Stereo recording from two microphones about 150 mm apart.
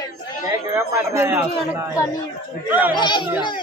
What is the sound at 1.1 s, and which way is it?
Speech, 20° right (ahead or behind).